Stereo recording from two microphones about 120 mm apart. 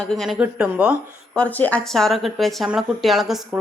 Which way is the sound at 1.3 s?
10° left (ahead or behind).